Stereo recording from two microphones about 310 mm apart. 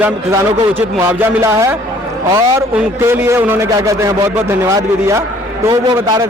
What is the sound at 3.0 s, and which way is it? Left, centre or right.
A man's voice, centre.